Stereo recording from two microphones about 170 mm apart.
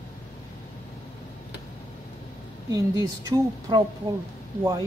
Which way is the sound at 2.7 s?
20° right (ahead or behind).